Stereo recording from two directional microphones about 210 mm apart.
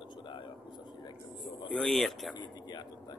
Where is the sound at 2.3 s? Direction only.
20° left (ahead or behind).